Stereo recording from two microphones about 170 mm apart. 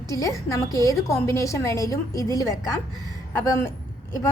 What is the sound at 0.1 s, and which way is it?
A woman's voice, 20° left (ahead or behind).